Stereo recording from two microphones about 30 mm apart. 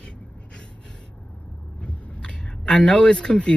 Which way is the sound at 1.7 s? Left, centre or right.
Left.